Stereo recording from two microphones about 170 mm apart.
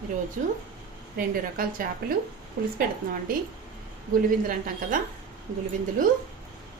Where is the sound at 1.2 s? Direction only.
55° right (ahead or behind).